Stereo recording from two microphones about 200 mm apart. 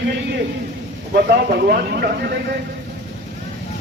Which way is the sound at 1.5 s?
50° right (ahead or behind).